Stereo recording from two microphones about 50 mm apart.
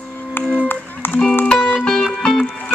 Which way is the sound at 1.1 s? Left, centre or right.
Centre.